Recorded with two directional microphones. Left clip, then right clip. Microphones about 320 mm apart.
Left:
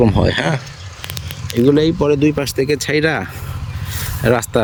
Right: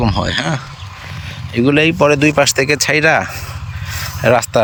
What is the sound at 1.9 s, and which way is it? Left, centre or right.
Speech, centre.